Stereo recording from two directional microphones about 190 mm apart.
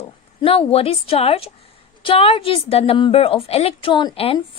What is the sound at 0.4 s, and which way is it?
A woman's voice, 30° left (ahead or behind).